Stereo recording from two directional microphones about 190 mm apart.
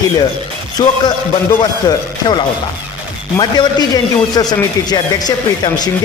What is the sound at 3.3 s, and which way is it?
Speech, 20° left (ahead or behind).